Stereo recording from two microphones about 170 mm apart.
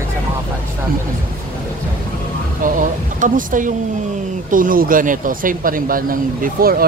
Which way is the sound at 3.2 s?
50° right (ahead or behind).